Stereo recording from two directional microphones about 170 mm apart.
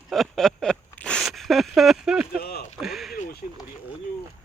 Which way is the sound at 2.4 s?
70° left (ahead or behind).